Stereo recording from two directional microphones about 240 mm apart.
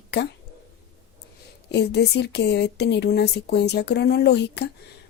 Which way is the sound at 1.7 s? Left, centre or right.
Left.